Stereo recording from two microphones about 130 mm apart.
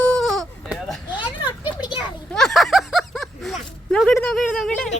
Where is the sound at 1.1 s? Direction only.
10° right (ahead or behind).